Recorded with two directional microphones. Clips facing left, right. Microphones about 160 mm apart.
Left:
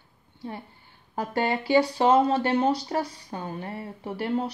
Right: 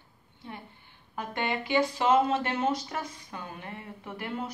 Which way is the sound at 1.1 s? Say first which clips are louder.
Left 5 dB; 35° left (ahead or behind).